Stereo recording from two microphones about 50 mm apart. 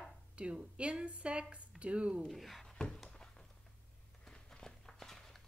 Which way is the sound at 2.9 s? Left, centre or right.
Centre.